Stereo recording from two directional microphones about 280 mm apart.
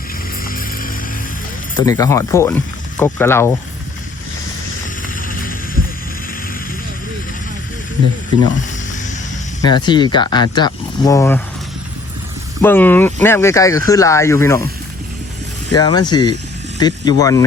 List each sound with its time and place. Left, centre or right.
0.4 s music: left
1.8 s speech: centre
5.0 s a sound: left
9.6 s speech: centre
12.6 s speech: centre
15.7 s speech: centre